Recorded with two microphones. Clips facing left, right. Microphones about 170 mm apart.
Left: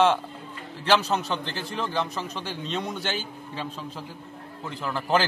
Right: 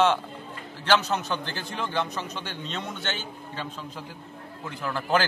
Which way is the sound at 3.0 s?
35° left (ahead or behind).